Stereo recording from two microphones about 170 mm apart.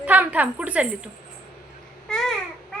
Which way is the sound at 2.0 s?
5° left (ahead or behind).